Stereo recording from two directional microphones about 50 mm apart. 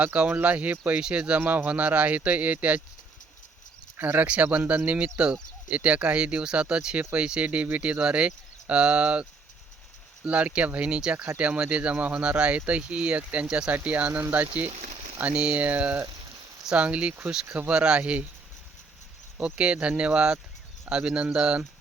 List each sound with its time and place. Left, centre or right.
0.0 s speech: right
1.4 s speech: right
3.9 s speech: right
10.2 s speech: right
14.1 s speech: right
15.2 s speech: right
19.5 s speech: right